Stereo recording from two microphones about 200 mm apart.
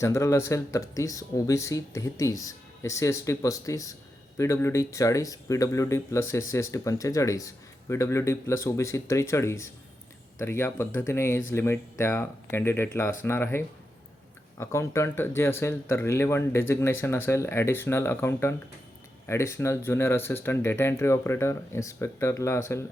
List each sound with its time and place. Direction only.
0.0 s speech: 15° left (ahead or behind)